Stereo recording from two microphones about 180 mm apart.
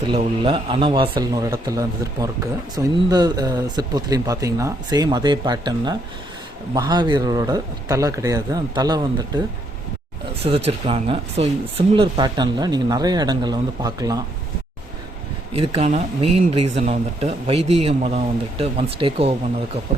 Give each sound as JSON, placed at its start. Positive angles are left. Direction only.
{"t": 0.0, "sound": "speech", "side_deg": -25}
{"t": 10.4, "sound": "speech", "side_deg": -30}
{"t": 15.5, "sound": "speech", "side_deg": -35}